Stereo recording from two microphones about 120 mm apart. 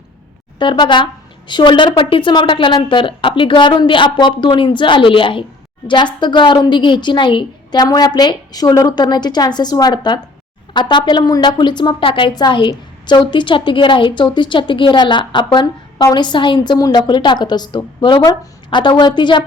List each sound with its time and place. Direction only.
0.6 s a woman's voice: 40° left (ahead or behind)